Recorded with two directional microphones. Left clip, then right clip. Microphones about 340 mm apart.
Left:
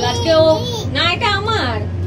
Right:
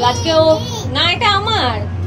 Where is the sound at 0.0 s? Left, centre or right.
Centre.